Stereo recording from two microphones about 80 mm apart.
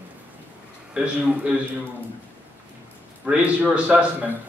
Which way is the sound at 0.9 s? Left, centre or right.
Centre.